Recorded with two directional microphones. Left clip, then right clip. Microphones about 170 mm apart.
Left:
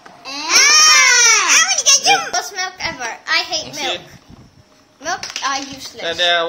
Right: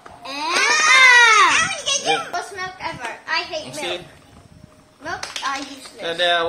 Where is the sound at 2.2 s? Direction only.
75° left (ahead or behind).